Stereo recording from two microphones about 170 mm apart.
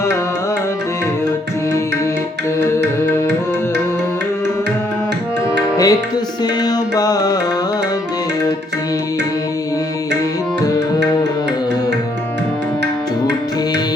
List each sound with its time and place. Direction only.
5.7 s music: 20° left (ahead or behind)